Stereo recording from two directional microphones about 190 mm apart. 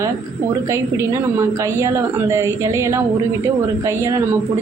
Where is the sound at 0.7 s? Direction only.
15° right (ahead or behind).